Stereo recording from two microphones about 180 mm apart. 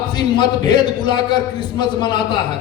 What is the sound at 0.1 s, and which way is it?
A man's voice, 25° left (ahead or behind).